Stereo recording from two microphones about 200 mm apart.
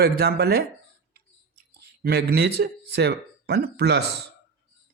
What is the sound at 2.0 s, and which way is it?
Speech, 50° right (ahead or behind).